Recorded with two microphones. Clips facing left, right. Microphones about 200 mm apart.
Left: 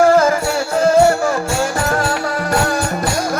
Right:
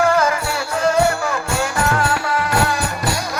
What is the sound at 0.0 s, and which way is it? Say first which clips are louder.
Music: left 5 dB; 40° left (ahead or behind).